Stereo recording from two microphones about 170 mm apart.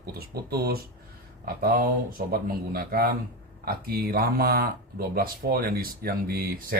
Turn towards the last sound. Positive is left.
turn(degrees=-60)  # may be behind; listen again after turning